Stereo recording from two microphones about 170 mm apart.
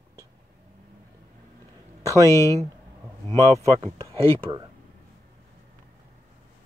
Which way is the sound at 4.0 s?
35° right (ahead or behind).